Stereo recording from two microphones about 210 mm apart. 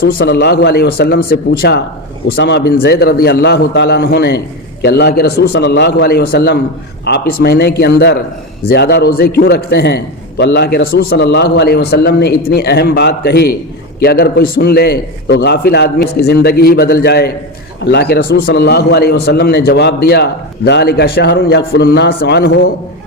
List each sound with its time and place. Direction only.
0.0 s a man's voice: 50° left (ahead or behind)